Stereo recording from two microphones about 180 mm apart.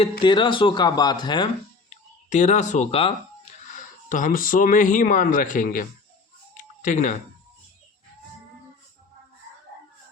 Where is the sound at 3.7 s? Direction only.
45° left (ahead or behind).